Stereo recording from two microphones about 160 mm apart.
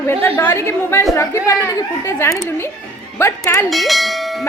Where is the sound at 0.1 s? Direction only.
10° left (ahead or behind).